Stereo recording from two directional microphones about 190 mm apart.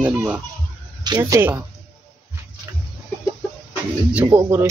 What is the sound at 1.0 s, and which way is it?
Speech, 20° right (ahead or behind).